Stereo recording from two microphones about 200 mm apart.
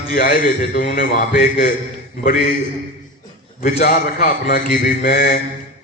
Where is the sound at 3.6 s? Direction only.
45° left (ahead or behind).